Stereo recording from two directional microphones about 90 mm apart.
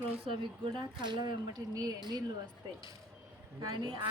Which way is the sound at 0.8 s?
60° right (ahead or behind).